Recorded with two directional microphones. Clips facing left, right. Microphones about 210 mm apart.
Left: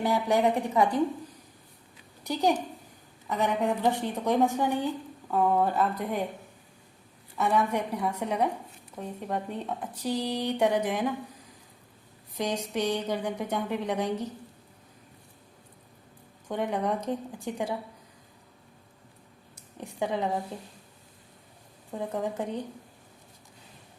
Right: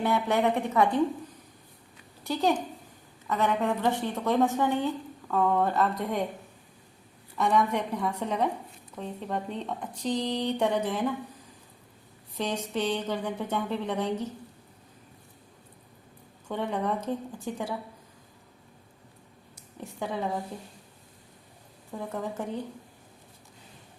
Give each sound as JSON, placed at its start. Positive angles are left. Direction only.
{"t": 0.3, "sound": "a woman's voice", "side_deg": 15}
{"t": 2.2, "sound": "a woman's voice", "side_deg": 15}
{"t": 7.3, "sound": "a woman's voice", "side_deg": 10}
{"t": 12.4, "sound": "a woman's voice", "side_deg": 15}
{"t": 16.5, "sound": "a woman's voice", "side_deg": 15}
{"t": 19.8, "sound": "a woman's voice", "side_deg": 15}
{"t": 21.9, "sound": "a woman's voice", "side_deg": 20}